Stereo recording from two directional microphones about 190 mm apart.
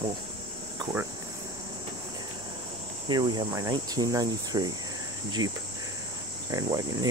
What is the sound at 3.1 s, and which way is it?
Cricket, 25° right (ahead or behind).